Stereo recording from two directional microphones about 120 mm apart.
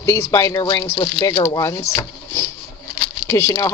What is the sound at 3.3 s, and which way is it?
Speech, 20° left (ahead or behind).